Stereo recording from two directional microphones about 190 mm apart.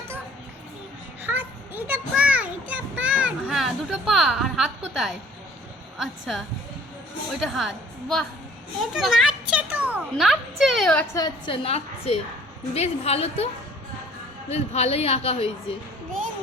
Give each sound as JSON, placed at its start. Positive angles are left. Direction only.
{"t": 1.2, "sound": "a sound", "side_deg": -10}
{"t": 6.0, "sound": "a woman's voice", "side_deg": 0}
{"t": 11.1, "sound": "a woman's voice", "side_deg": 25}
{"t": 14.5, "sound": "a woman's voice", "side_deg": 35}